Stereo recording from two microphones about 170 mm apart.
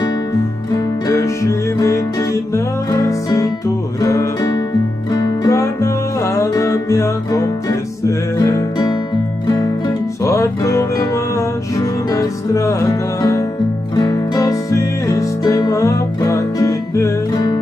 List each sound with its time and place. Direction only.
0.7 s music: 20° left (ahead or behind)
10.2 s music: 15° left (ahead or behind)